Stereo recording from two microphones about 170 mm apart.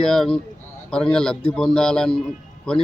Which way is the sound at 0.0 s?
5° left (ahead or behind).